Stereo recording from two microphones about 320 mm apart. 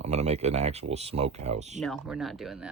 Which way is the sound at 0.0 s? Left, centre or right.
Centre.